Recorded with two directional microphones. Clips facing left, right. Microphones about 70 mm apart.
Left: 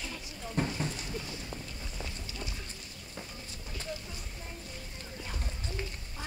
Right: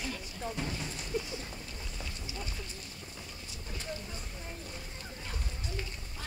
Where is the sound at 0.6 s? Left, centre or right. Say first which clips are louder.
Left 8 dB; left.